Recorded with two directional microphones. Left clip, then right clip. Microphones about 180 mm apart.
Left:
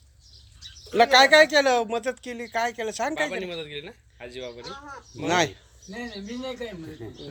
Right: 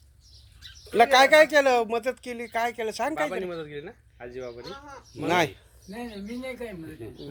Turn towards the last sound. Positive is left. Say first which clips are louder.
# left 2 dB
turn(degrees=0)  # may be behind; listen again after turning